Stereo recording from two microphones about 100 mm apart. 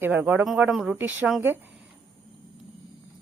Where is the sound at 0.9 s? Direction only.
15° right (ahead or behind).